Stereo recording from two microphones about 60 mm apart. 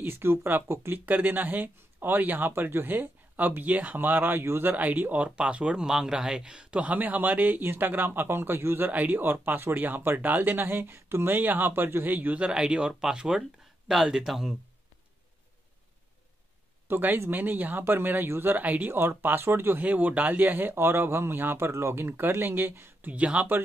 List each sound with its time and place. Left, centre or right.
0.0 s speech: right
4.7 s speech: right
12.4 s speech: centre
16.8 s speech: right
18.9 s speech: right
19.8 s speech: right
23.1 s speech: right